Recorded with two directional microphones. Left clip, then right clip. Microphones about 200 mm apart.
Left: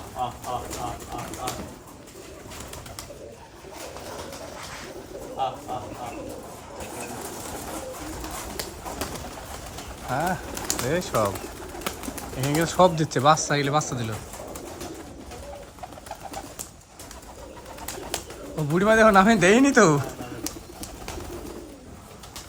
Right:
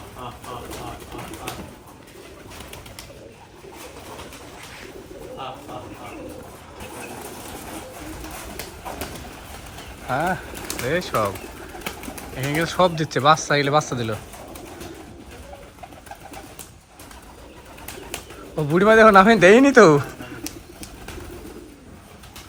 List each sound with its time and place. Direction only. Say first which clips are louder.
10.1 s pigeon: right 3 dB; 10° left (ahead or behind)
10.9 s speech: right 3 dB; 15° left (ahead or behind)
12.4 s speech: even; 15° left (ahead or behind)
18.5 s speech: right 5 dB; 10° left (ahead or behind)